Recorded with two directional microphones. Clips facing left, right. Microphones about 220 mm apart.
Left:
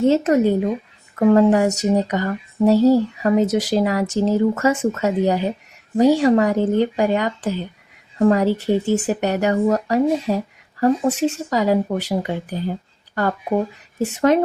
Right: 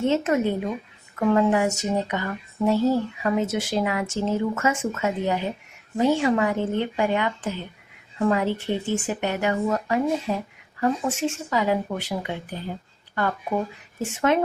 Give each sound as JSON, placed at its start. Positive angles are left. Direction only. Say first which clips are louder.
{"t": 0.0, "sound": "speech", "louder": "left 6 dB", "side_deg": 35}